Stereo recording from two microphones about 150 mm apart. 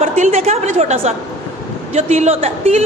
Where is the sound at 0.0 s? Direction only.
45° right (ahead or behind).